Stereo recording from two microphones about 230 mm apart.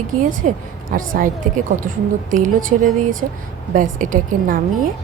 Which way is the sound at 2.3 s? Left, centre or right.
Right.